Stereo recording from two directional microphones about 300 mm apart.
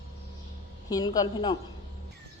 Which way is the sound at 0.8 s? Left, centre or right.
Centre.